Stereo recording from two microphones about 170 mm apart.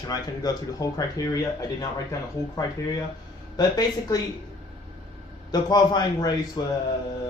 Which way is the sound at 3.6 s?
20° left (ahead or behind).